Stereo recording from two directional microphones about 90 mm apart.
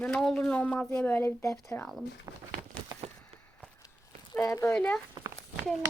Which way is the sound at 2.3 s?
35° right (ahead or behind).